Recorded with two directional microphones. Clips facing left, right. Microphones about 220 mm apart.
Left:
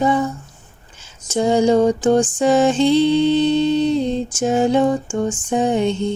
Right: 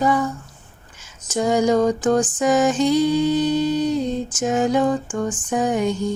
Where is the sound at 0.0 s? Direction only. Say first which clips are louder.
Left 2 dB; 25° left (ahead or behind).